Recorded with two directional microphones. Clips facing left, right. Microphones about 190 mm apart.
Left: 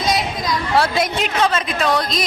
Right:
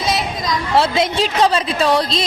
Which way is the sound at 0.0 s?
Centre (ahead or behind).